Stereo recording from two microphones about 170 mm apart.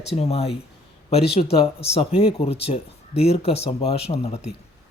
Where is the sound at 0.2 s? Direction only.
35° left (ahead or behind).